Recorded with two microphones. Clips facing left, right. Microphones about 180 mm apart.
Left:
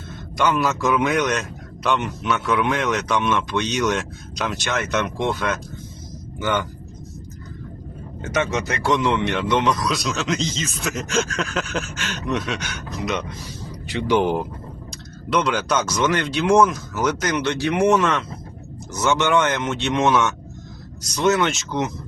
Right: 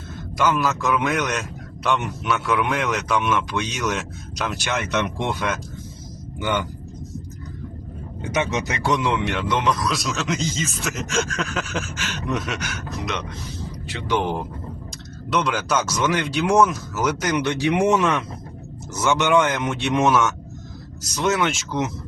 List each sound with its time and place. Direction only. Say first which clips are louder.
0.3 s a man's voice: left 1 dB; centre (ahead or behind)
6.4 s speech: left 1 dB; 15° right (ahead or behind)
8.2 s speech: left 1 dB; 15° right (ahead or behind)
9.0 s a man's voice: left 2 dB; 5° right (ahead or behind)
13.8 s speech: left 5 dB; 15° left (ahead or behind)
15.3 s a man's voice: left 2 dB; centre (ahead or behind)